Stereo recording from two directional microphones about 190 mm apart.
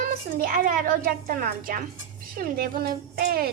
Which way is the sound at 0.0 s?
45° right (ahead or behind).